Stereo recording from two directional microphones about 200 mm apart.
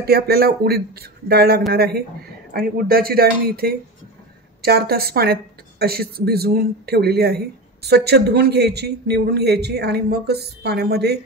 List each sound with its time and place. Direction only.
0.0 s a woman's voice: 50° right (ahead or behind)